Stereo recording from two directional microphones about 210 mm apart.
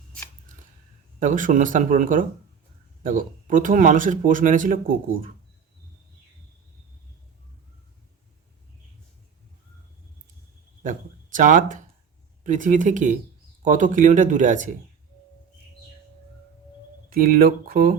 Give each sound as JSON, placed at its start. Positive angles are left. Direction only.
{"t": 1.2, "sound": "speech", "side_deg": -40}
{"t": 10.8, "sound": "speech", "side_deg": -40}
{"t": 17.1, "sound": "speech", "side_deg": -45}